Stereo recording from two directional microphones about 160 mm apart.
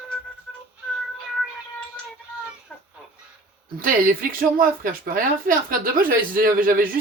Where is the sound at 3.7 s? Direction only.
60° right (ahead or behind).